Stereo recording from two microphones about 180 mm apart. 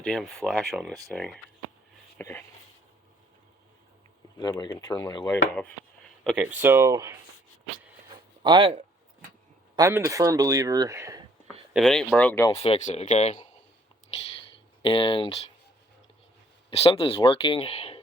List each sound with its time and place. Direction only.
0.0 s speech: 5° left (ahead or behind)
4.4 s speech: 25° left (ahead or behind)
6.2 s speech: 10° right (ahead or behind)
8.4 s speech: 25° right (ahead or behind)
9.7 s speech: 15° right (ahead or behind)
11.7 s speech: centre (ahead or behind)
12.5 s speech: 35° left (ahead or behind)
14.8 s speech: 30° left (ahead or behind)
16.6 s speech: 35° left (ahead or behind)